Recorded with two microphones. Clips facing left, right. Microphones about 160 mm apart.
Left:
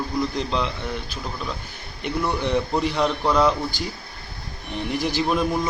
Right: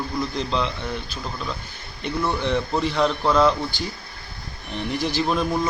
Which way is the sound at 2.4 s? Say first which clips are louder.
Left 1 dB; 10° left (ahead or behind).